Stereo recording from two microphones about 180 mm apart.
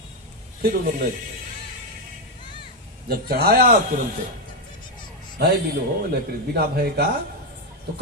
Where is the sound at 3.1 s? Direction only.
55° right (ahead or behind).